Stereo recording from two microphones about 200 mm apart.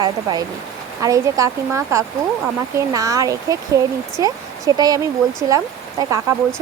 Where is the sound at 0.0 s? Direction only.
20° right (ahead or behind).